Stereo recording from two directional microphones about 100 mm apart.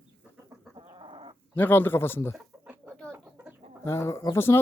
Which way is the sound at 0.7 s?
60° right (ahead or behind).